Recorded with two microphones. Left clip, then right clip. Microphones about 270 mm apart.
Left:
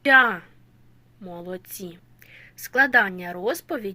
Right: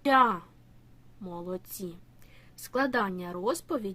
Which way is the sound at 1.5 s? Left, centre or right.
Centre.